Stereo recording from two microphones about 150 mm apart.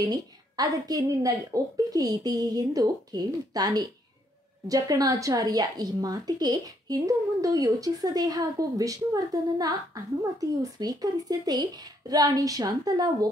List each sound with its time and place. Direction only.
0.0 s a woman's voice: 25° right (ahead or behind)